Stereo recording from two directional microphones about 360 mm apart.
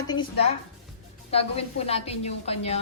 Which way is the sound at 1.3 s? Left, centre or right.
Centre.